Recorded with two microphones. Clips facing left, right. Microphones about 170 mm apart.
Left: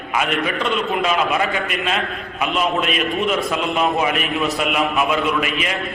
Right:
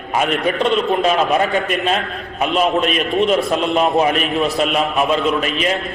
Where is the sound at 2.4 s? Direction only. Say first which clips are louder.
Right 4 dB; 40° right (ahead or behind).